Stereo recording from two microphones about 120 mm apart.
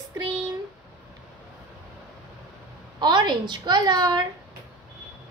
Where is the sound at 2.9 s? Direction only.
35° right (ahead or behind).